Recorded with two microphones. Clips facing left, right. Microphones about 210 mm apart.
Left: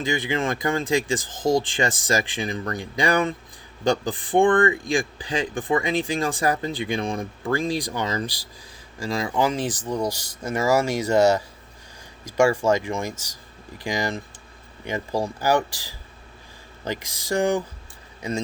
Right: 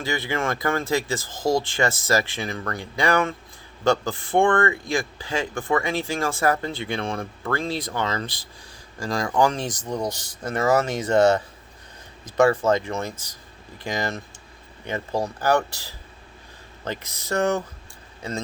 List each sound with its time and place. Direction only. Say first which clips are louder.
0.0 s a man's voice: left 2 dB; 15° left (ahead or behind)
1.3 s speech: even; 50° left (ahead or behind)
1.5 s a man's voice: even; 15° left (ahead or behind)
9.0 s a man's voice: right 2 dB; centre (ahead or behind)